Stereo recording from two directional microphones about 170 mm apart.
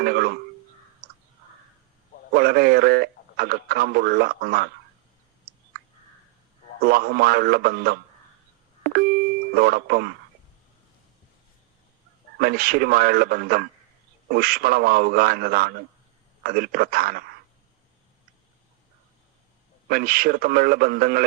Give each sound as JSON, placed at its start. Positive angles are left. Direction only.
{"t": 0.0, "sound": "a sound", "side_deg": -65}
{"t": 2.3, "sound": "speech", "side_deg": -60}
{"t": 5.5, "sound": "clicking", "side_deg": -60}
{"t": 6.8, "sound": "speech", "side_deg": -60}
{"t": 8.8, "sound": "beep", "side_deg": -65}
{"t": 9.6, "sound": "speech", "side_deg": -65}
{"t": 12.4, "sound": "speech", "side_deg": -60}
{"t": 19.9, "sound": "speech", "side_deg": -60}